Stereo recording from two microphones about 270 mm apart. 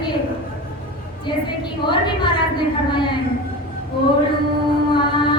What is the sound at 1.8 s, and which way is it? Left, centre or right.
A woman's voice, centre.